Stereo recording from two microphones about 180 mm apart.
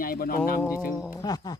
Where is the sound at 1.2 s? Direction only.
20° left (ahead or behind).